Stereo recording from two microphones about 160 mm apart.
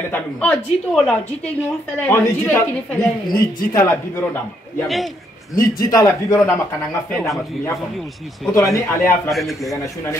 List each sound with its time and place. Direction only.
0.1 s speech: 5° left (ahead or behind)
4.8 s a man's voice: centre (ahead or behind)
5.6 s speech: 20° left (ahead or behind); by 7.3 s 5° left (ahead or behind)
8.5 s speech: 20° left (ahead or behind)
9.3 s a man's voice: centre (ahead or behind)